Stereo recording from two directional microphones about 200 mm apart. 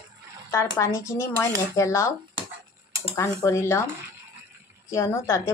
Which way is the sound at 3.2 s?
10° left (ahead or behind).